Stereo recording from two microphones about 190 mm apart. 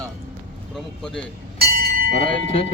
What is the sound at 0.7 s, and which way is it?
Speech, centre (ahead or behind).